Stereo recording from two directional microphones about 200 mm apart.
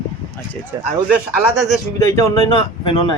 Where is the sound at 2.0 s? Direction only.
15° left (ahead or behind).